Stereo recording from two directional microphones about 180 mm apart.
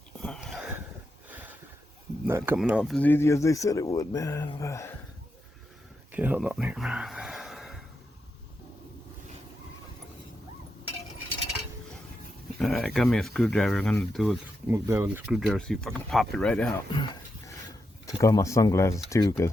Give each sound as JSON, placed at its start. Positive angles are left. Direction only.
{"t": 0.2, "sound": "whispering", "side_deg": 5}
{"t": 1.3, "sound": "a sound", "side_deg": -10}
{"t": 2.2, "sound": "speech", "side_deg": -10}
{"t": 6.1, "sound": "a sound", "side_deg": -10}
{"t": 12.5, "sound": "speech", "side_deg": 5}
{"t": 14.7, "sound": "speech", "side_deg": -15}
{"t": 15.3, "sound": "speech", "side_deg": 0}
{"t": 18.0, "sound": "speech", "side_deg": 15}